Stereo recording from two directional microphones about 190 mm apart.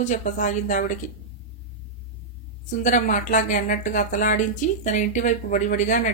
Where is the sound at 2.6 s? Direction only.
40° left (ahead or behind).